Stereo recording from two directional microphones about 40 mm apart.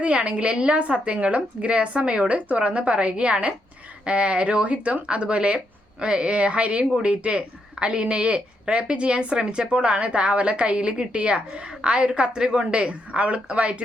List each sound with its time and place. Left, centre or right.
0.0 s a woman's voice: right